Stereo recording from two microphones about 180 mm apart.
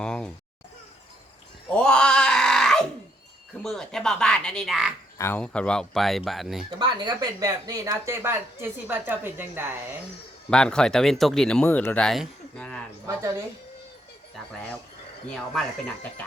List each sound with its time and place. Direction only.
0.0 s a sound: 5° left (ahead or behind)
1.7 s a sound: 5° left (ahead or behind)
3.6 s speech: 5° left (ahead or behind)
5.1 s speech: 10° left (ahead or behind)
6.7 s speech: 25° right (ahead or behind)
10.5 s speech: 5° left (ahead or behind)
13.1 s speech: 15° right (ahead or behind)
14.3 s speech: 5° left (ahead or behind)